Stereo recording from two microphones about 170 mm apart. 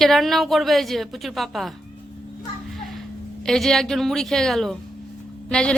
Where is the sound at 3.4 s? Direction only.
Centre (ahead or behind).